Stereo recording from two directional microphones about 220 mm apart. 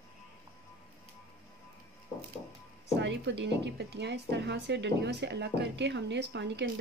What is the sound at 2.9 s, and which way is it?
A woman's voice, 55° right (ahead or behind).